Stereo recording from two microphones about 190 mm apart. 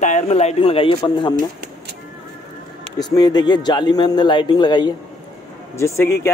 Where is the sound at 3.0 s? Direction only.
20° left (ahead or behind).